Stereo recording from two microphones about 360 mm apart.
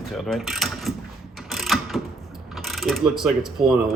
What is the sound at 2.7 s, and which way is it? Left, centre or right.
Speech, centre.